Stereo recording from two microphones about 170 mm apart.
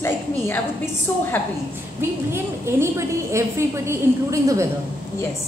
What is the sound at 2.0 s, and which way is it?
A woman's voice, 15° right (ahead or behind).